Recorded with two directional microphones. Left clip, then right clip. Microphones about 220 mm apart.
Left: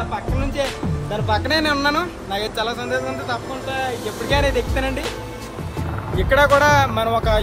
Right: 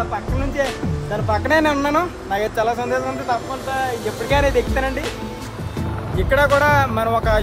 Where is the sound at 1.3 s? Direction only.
15° right (ahead or behind).